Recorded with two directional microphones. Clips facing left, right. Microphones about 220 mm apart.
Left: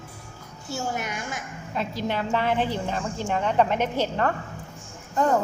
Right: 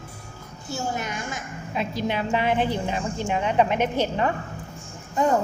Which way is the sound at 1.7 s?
15° right (ahead or behind).